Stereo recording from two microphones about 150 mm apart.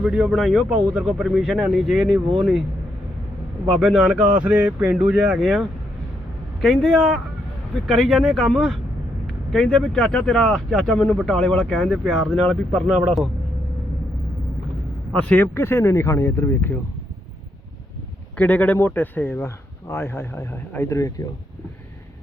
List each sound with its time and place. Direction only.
0.0 s speech: 5° right (ahead or behind)
3.8 s speech: centre (ahead or behind)
15.1 s speech: 10° left (ahead or behind)
18.3 s speech: 10° left (ahead or behind)